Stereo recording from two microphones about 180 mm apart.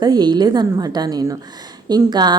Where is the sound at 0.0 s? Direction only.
25° right (ahead or behind).